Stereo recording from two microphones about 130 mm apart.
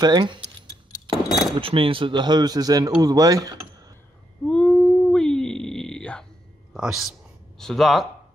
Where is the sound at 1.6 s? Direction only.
45° right (ahead or behind); by 3.9 s 25° right (ahead or behind).